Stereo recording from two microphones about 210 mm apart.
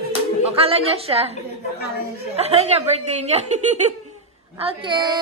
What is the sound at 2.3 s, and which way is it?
A woman's voice, 30° right (ahead or behind).